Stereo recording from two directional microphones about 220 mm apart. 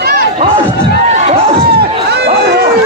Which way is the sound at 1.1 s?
30° right (ahead or behind).